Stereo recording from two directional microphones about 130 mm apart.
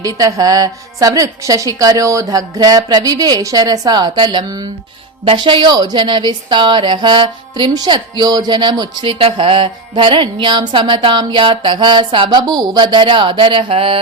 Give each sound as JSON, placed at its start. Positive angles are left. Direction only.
{"t": 0.0, "sound": "a woman's voice", "side_deg": -25}
{"t": 5.2, "sound": "music", "side_deg": -40}
{"t": 9.1, "sound": "music", "side_deg": -45}